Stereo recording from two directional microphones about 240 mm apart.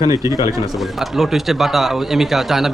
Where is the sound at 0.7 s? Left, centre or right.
Centre.